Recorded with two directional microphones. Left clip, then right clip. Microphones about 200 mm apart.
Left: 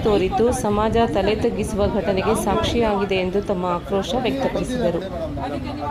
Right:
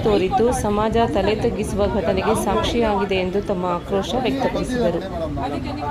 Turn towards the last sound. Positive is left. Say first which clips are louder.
# right 1 dB
turn(degrees=0)  # may be behind; listen again after turning